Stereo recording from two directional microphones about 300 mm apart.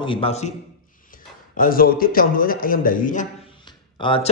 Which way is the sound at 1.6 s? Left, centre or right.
Left.